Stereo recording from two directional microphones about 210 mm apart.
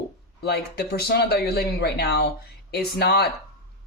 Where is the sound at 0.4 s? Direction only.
50° left (ahead or behind).